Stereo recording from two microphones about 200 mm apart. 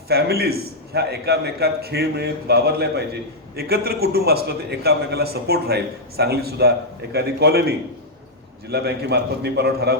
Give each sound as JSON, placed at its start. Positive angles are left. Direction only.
{"t": 0.1, "sound": "a man's voice", "side_deg": -50}